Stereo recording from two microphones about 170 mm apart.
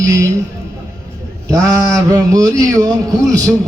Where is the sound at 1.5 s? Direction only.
20° right (ahead or behind).